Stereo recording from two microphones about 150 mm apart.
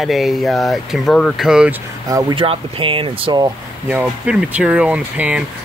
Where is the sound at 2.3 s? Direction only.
35° right (ahead or behind).